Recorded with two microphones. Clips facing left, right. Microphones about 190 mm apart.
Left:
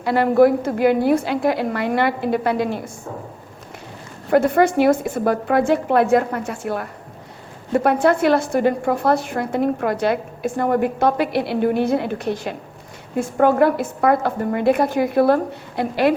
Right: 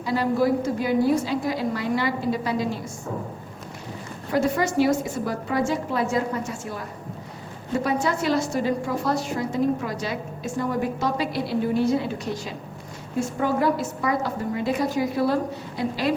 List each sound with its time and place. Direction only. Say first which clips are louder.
0.0 s a woman's voice: left 8 dB; 60° left (ahead or behind)
4.3 s a woman's voice: left 7 dB; 55° left (ahead or behind)